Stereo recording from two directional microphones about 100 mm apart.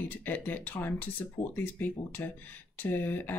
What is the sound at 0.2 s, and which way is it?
Speech, 15° left (ahead or behind).